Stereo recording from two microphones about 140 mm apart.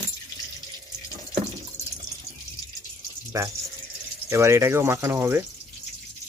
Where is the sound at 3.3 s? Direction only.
20° right (ahead or behind).